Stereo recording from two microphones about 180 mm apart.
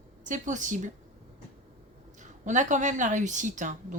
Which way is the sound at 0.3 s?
45° right (ahead or behind).